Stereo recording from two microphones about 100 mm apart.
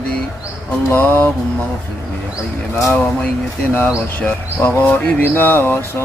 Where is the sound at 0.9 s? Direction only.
20° left (ahead or behind).